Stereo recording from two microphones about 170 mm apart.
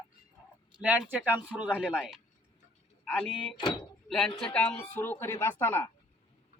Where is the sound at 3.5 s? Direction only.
25° left (ahead or behind).